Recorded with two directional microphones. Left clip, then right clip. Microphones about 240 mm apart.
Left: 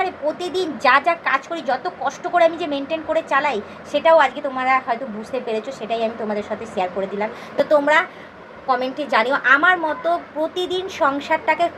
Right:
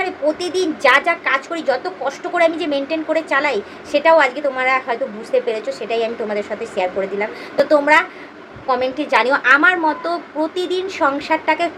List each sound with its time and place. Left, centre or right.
0.0 s a woman's voice: centre